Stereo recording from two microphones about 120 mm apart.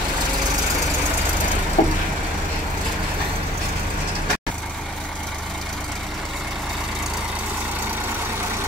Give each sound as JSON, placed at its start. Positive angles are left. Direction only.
{"t": 1.8, "sound": "vehicle", "side_deg": 90}